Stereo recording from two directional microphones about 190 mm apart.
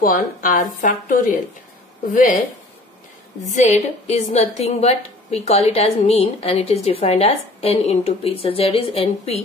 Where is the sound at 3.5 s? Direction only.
40° left (ahead or behind).